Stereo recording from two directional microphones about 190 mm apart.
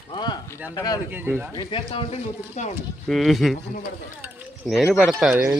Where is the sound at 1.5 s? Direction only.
25° left (ahead or behind).